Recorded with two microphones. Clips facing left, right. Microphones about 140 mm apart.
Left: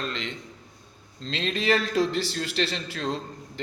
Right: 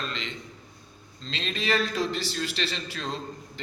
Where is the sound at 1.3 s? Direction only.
55° left (ahead or behind).